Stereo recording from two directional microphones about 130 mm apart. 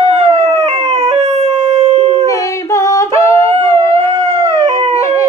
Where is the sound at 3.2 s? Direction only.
20° left (ahead or behind).